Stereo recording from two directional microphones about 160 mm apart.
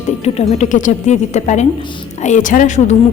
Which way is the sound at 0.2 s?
45° left (ahead or behind).